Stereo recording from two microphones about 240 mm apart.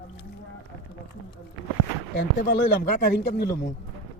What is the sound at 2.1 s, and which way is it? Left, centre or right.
Speech, left.